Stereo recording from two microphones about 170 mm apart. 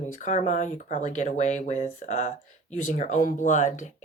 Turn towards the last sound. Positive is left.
turn(degrees=45)  # may be behind; listen again after turning